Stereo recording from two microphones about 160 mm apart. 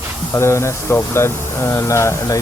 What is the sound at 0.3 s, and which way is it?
Speech, 15° left (ahead or behind).